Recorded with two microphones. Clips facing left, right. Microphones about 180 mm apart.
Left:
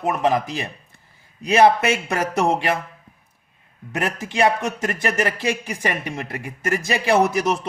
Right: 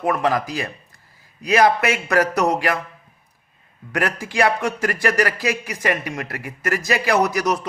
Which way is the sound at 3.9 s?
20° left (ahead or behind).